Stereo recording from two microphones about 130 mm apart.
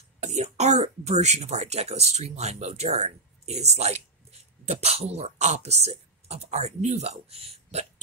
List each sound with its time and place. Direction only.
0.2 s speech: 60° right (ahead or behind)